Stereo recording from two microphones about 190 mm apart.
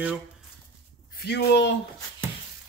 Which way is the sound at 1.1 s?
60° left (ahead or behind).